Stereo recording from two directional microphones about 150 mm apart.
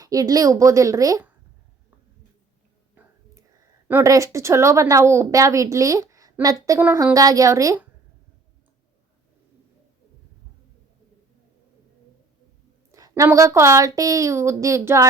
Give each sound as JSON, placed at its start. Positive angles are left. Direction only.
{"t": 0.0, "sound": "a woman's voice", "side_deg": -25}
{"t": 3.8, "sound": "a woman's voice", "side_deg": -15}
{"t": 12.9, "sound": "a sound", "side_deg": -25}
{"t": 13.2, "sound": "a woman's voice", "side_deg": -20}